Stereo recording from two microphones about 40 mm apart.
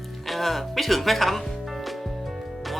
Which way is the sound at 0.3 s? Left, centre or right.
Centre.